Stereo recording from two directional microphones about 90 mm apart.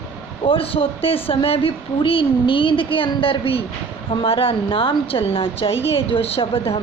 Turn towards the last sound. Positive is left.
turn(degrees=90)